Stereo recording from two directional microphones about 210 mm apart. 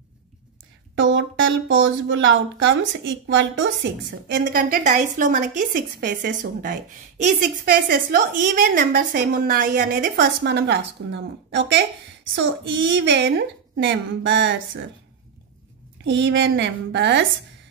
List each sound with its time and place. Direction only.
0.9 s speech: 65° right (ahead or behind)
4.3 s a woman's voice: 40° right (ahead or behind); by 14.9 s 60° right (ahead or behind)
16.0 s speech: 60° right (ahead or behind)